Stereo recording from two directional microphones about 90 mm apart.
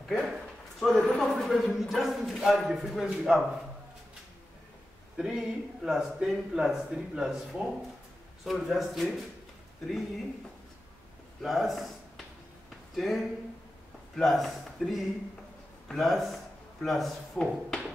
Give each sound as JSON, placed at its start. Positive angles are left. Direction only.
{"t": 0.3, "sound": "speech", "side_deg": 0}
{"t": 5.1, "sound": "speech", "side_deg": -5}
{"t": 11.4, "sound": "speech", "side_deg": 0}
{"t": 12.9, "sound": "speech", "side_deg": 0}